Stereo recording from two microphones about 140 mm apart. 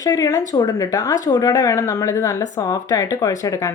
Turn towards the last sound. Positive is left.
turn(degrees=25)  # may be behind; listen again after turning